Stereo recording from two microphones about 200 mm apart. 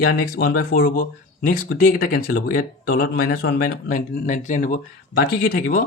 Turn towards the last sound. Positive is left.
turn(degrees=50)  # may be behind; listen again after turning